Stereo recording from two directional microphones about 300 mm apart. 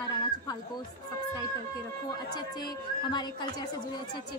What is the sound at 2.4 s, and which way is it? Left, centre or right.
A woman's voice, centre.